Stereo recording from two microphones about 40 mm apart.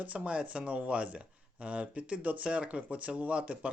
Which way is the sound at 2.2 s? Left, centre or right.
Right.